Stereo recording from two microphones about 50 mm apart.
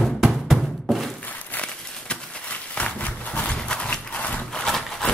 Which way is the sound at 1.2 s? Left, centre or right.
Left.